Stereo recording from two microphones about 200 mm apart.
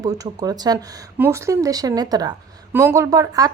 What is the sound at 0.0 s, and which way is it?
Speech, 20° right (ahead or behind).